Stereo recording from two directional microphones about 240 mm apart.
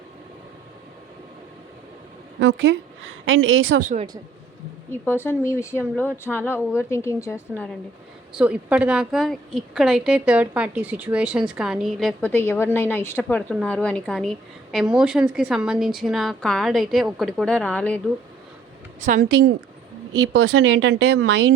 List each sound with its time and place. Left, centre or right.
2.4 s a woman's voice: right
5.0 s a woman's voice: centre
8.4 s a woman's voice: centre
18.9 s a woman's voice: right